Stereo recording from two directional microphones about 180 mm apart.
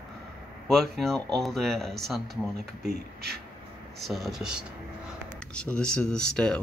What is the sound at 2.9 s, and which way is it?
Speech, 60° right (ahead or behind).